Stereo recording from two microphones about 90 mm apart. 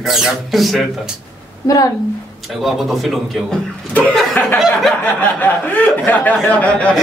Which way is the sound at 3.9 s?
15° left (ahead or behind).